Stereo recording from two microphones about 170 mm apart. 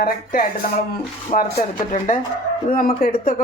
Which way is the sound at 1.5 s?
45° left (ahead or behind).